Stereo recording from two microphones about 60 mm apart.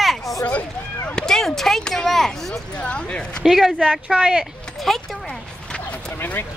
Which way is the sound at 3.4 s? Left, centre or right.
Centre.